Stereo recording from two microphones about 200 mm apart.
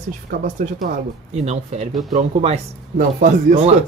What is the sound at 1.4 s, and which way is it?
Speech, 35° right (ahead or behind).